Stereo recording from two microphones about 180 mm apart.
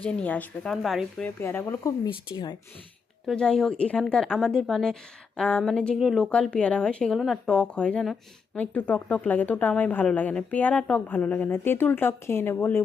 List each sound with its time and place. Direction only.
0.0 s speech: 5° left (ahead or behind)
1.4 s a woman's voice: 15° left (ahead or behind)
2.3 s speech: 25° left (ahead or behind)
3.2 s a woman's voice: 5° left (ahead or behind)